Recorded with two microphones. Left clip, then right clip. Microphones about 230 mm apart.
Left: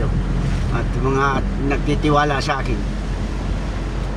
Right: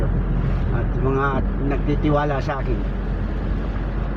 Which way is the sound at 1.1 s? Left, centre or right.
Left.